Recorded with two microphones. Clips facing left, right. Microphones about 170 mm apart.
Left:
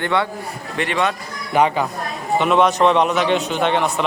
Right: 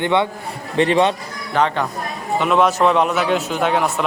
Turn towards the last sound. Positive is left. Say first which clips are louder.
# even
turn(degrees=-5)  # may be behind; listen again after turning